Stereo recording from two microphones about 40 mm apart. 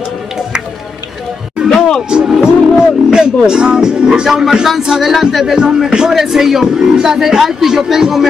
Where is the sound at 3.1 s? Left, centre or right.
Centre.